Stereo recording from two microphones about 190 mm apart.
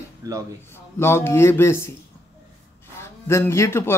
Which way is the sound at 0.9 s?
10° left (ahead or behind).